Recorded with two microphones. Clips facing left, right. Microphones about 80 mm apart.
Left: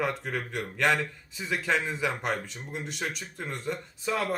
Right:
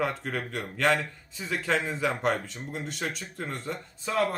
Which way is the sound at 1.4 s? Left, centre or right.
Centre.